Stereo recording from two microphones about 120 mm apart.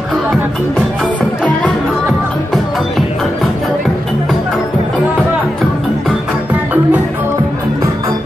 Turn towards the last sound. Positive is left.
turn(degrees=-15)  # may be behind; listen again after turning